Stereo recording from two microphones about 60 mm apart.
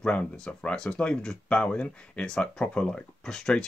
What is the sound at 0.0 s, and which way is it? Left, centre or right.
Speech, centre.